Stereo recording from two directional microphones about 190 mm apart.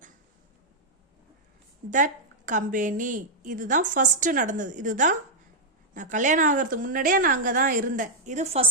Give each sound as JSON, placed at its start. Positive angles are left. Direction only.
{"t": 2.5, "sound": "a woman's voice", "side_deg": -45}